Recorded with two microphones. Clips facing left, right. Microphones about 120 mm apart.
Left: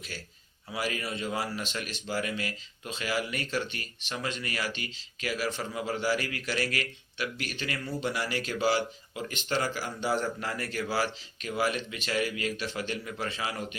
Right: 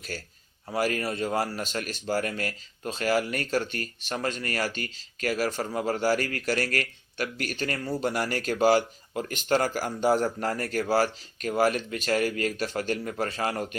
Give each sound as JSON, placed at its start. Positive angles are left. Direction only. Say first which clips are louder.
{"t": 0.1, "sound": "a man's voice", "louder": "right 5 dB", "side_deg": -40}